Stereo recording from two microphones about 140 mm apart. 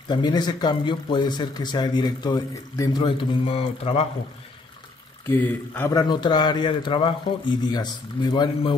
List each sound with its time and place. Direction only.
0.1 s speech: 30° left (ahead or behind)
3.0 s speech: 40° left (ahead or behind)
5.3 s a man's voice: 15° left (ahead or behind)
5.9 s speech: 30° left (ahead or behind)